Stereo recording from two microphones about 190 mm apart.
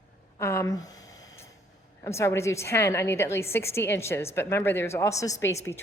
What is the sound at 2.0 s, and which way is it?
A woman's voice, 15° left (ahead or behind).